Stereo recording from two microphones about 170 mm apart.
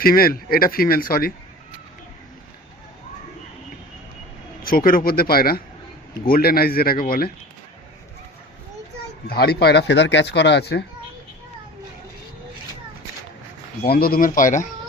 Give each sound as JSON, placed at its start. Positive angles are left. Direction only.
{"t": 0.0, "sound": "speech", "side_deg": 60}
{"t": 4.6, "sound": "speech", "side_deg": 55}
{"t": 9.2, "sound": "speech", "side_deg": 65}
{"t": 13.8, "sound": "speech", "side_deg": 65}